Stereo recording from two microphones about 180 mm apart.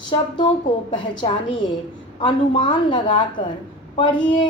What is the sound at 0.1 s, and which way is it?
A woman's voice, 25° left (ahead or behind).